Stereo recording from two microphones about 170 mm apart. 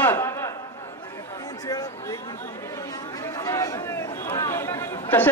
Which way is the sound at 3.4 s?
20° left (ahead or behind).